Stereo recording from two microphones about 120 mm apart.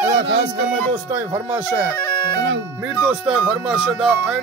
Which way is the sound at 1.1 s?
20° right (ahead or behind).